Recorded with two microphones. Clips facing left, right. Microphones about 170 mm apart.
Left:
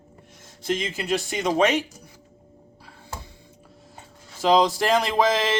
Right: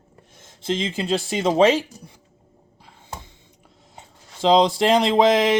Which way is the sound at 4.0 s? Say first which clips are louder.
Right 3 dB; 25° right (ahead or behind).